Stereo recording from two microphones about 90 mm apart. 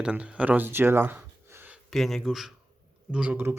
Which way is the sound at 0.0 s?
10° right (ahead or behind).